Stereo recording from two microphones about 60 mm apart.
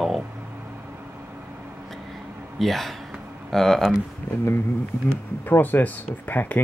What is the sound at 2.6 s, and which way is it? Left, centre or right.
Speech, centre.